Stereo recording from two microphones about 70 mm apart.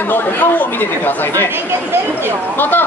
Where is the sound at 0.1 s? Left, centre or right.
Left.